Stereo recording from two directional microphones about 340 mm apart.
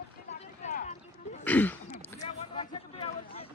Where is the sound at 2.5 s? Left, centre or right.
Centre.